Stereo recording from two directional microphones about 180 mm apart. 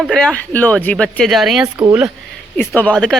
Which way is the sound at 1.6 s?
20° right (ahead or behind).